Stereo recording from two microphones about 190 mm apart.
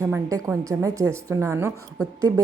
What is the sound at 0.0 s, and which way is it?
A woman's voice, 15° right (ahead or behind).